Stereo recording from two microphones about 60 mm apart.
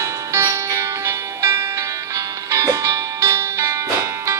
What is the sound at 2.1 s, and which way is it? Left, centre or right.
Music, right.